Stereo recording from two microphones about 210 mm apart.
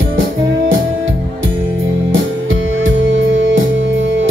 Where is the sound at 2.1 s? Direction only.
65° right (ahead or behind).